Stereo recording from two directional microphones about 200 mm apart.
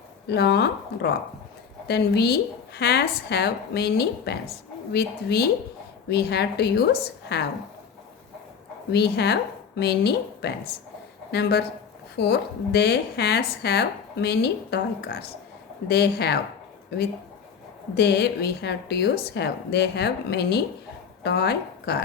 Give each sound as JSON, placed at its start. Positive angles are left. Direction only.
{"t": 0.3, "sound": "a woman's voice", "side_deg": 55}
{"t": 8.9, "sound": "speech", "side_deg": 55}
{"t": 17.9, "sound": "a woman's voice", "side_deg": 55}